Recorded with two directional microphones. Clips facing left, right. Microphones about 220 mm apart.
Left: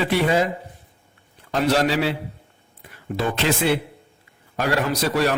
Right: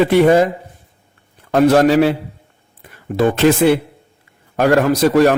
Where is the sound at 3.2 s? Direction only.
55° right (ahead or behind).